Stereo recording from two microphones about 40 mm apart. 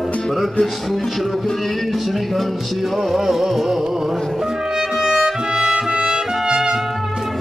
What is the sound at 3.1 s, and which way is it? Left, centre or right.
Music, centre.